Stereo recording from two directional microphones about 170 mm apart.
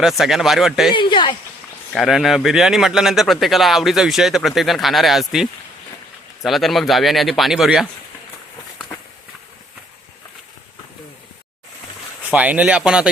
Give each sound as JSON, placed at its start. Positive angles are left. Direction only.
{"t": 0.0, "sound": "speech", "side_deg": 0}
{"t": 0.9, "sound": "speech", "side_deg": 30}
{"t": 1.9, "sound": "speech", "side_deg": 0}
{"t": 12.3, "sound": "speech", "side_deg": -10}